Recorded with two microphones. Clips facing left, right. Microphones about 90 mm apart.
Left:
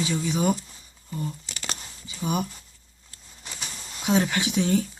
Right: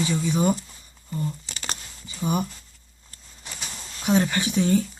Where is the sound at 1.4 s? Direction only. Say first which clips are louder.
Right 1 dB; 45° right (ahead or behind).